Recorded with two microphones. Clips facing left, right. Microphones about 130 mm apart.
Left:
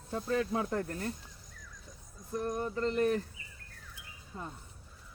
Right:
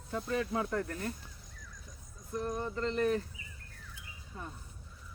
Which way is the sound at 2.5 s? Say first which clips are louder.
Left 2 dB; 15° left (ahead or behind).